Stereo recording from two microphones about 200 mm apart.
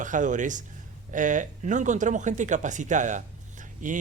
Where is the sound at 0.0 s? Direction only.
40° right (ahead or behind).